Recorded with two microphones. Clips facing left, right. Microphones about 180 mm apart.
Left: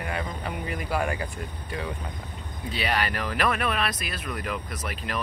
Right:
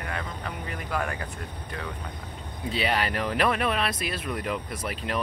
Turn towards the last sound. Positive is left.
turn(degrees=-25)  # may be behind; listen again after turning